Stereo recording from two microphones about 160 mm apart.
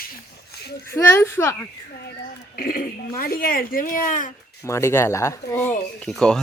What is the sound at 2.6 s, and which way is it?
Speech, 60° left (ahead or behind).